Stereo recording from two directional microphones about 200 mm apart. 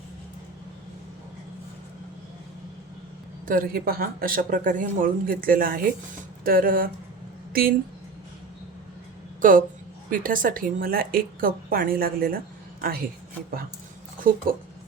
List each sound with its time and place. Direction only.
3.4 s speech: 45° right (ahead or behind)
9.4 s speech: 45° right (ahead or behind)